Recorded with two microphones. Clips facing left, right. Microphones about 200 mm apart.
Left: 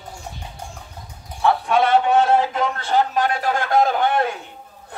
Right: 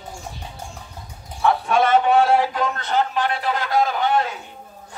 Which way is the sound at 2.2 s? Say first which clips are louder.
Even; 20° left (ahead or behind).